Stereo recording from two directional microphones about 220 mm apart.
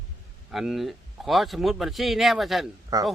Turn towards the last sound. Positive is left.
turn(degrees=-15)  # may be behind; listen again after turning